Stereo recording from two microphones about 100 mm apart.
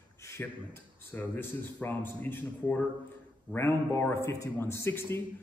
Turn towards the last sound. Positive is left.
turn(degrees=25)  # may be behind; listen again after turning